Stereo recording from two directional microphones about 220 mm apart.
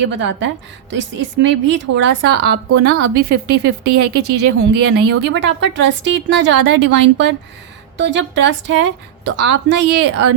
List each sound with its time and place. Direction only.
0.0 s a woman's voice: 55° right (ahead or behind)